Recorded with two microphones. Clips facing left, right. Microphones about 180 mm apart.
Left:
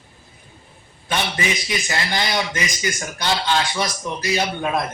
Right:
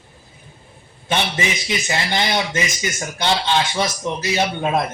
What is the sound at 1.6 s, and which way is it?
A man's voice, 25° right (ahead or behind).